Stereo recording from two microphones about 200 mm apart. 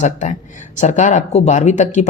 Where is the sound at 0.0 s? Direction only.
35° left (ahead or behind).